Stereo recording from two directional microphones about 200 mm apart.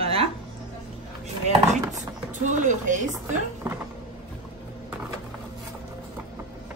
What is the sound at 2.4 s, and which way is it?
Speech, 40° right (ahead or behind).